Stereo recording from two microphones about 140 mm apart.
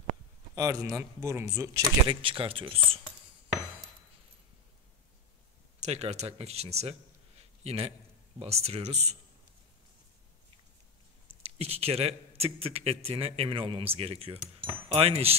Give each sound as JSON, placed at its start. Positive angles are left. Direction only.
{"t": 0.6, "sound": "speech", "side_deg": -25}
{"t": 2.0, "sound": "speech", "side_deg": -40}
{"t": 5.8, "sound": "speech", "side_deg": -50}
{"t": 11.5, "sound": "speech", "side_deg": -45}